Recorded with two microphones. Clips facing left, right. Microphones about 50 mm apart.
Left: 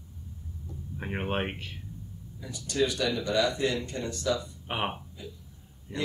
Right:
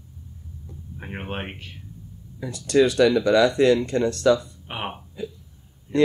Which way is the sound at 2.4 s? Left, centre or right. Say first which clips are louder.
Right 10 dB; right.